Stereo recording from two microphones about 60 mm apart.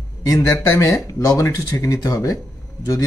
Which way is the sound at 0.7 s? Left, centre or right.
Left.